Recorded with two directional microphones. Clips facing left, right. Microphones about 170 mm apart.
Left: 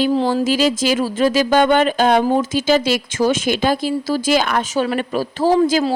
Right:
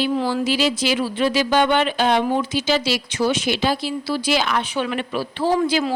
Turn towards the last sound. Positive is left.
turn(degrees=40)  # may be behind; listen again after turning